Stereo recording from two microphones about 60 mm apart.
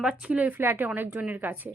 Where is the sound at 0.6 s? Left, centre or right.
Right.